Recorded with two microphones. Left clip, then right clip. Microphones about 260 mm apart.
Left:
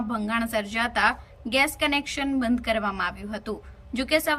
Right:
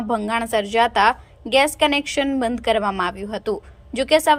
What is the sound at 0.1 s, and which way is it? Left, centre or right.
A woman's voice, centre.